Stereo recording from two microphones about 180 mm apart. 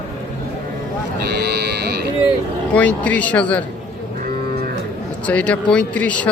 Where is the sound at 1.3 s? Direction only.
65° right (ahead or behind).